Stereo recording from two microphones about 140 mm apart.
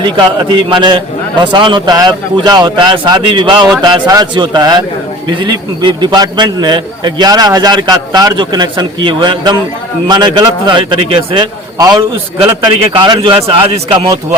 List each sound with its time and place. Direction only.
0.0 s a man's voice: 35° right (ahead or behind)